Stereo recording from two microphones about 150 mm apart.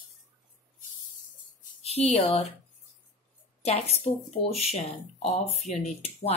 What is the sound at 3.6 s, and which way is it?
Speech, 45° left (ahead or behind).